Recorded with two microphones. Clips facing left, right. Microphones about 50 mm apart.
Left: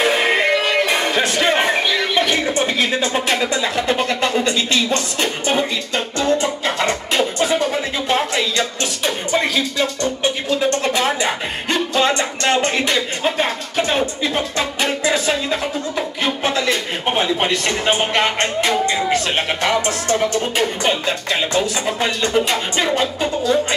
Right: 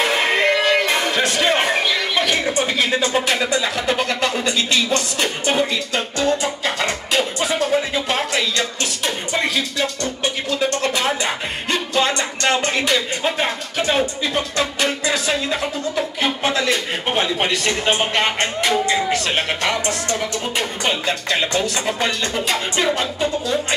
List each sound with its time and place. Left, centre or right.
0.0 s music: centre
4.2 s speech: left
6.1 s music: left
10.5 s a sound: centre
14.8 s music: centre
17.5 s speech: centre
19.3 s speech: centre
20.5 s music: centre
22.9 s speech: centre